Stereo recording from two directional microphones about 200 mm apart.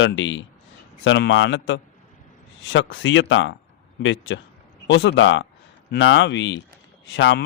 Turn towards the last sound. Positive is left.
turn(degrees=65)  # may be behind; listen again after turning